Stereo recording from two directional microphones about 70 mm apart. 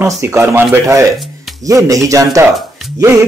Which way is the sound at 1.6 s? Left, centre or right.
Right.